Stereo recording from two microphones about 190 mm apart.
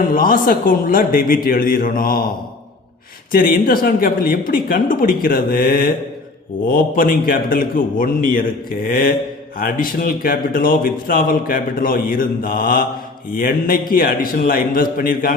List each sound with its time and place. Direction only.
0.1 s speech: 45° left (ahead or behind)
3.3 s speech: 50° left (ahead or behind)